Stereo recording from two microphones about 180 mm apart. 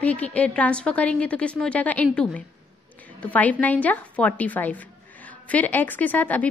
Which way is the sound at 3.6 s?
10° left (ahead or behind).